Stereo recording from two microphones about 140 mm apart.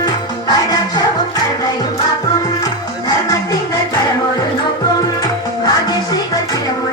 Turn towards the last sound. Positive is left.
turn(degrees=25)  # may be behind; listen again after turning